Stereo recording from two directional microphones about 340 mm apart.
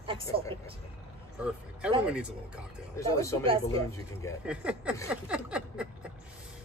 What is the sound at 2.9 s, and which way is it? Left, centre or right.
Speech, centre.